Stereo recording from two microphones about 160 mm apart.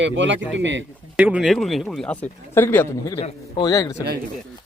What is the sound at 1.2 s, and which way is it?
Speech, 5° right (ahead or behind).